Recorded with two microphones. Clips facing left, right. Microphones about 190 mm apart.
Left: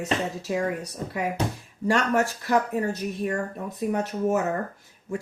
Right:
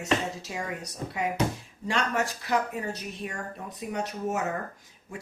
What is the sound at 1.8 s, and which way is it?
Speech, 50° left (ahead or behind).